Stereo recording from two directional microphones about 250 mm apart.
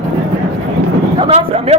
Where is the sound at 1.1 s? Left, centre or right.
Right.